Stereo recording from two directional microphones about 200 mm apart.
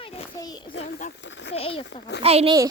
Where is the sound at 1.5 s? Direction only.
30° left (ahead or behind).